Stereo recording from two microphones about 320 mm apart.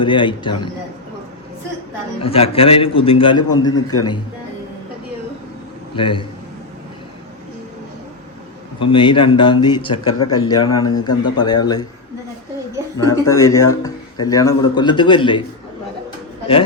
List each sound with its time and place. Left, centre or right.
0.0 s speech: centre
2.2 s speech: centre
6.0 s speech: centre
8.8 s speech: centre
9.9 s a man's voice: left
10.3 s speech: centre
13.1 s speech: centre